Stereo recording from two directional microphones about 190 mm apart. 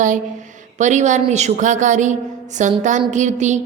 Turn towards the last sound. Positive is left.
turn(degrees=-40)  # may be behind; listen again after turning